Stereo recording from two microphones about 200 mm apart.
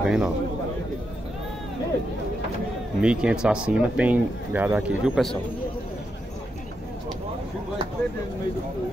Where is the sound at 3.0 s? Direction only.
5° right (ahead or behind).